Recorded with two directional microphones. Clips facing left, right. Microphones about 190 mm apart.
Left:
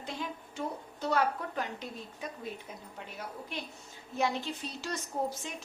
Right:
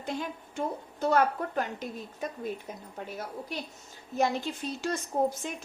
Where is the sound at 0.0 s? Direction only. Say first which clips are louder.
Right 4 dB; 50° right (ahead or behind).